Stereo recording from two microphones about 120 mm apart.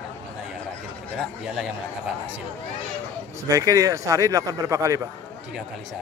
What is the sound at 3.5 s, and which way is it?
A man's voice, 25° right (ahead or behind).